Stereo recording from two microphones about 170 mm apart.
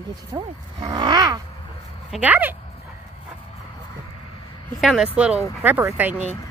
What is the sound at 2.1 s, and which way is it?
Speech, 10° right (ahead or behind).